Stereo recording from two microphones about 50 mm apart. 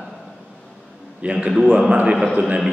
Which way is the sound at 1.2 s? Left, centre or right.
Right.